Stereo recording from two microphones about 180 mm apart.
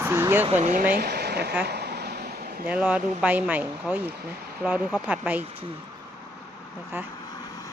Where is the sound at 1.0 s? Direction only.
65° right (ahead or behind).